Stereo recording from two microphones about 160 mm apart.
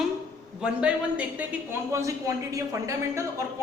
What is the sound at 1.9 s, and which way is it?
Speech, 20° right (ahead or behind).